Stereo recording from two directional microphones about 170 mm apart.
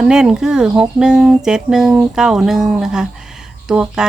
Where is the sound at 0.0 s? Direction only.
5° right (ahead or behind).